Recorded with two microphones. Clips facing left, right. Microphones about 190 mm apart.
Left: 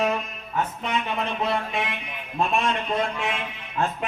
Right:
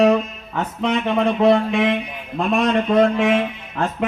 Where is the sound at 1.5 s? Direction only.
65° right (ahead or behind).